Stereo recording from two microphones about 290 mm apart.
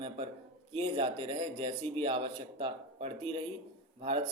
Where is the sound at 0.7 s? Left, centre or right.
Centre.